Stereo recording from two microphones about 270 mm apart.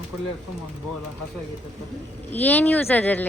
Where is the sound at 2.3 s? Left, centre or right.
Centre.